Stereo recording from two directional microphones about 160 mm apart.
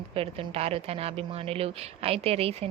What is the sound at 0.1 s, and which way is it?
Speech, 35° right (ahead or behind).